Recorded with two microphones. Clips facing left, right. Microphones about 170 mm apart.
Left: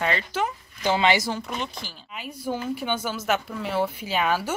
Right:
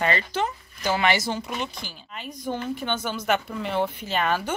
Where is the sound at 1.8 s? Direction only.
5° left (ahead or behind).